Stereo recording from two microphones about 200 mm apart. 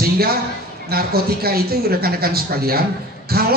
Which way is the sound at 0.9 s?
50° right (ahead or behind).